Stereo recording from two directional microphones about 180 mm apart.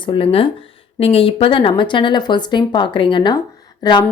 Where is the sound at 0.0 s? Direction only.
30° left (ahead or behind).